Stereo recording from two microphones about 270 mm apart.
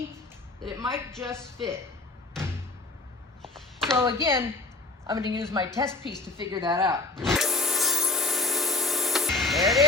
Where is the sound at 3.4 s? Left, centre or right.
Centre.